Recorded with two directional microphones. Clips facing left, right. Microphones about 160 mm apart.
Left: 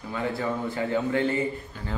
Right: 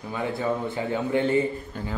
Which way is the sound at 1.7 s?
50° right (ahead or behind).